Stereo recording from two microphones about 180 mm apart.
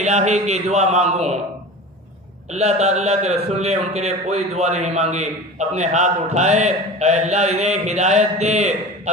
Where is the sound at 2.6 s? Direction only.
40° right (ahead or behind).